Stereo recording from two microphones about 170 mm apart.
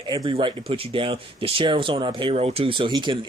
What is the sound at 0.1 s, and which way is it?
Speech, 30° right (ahead or behind).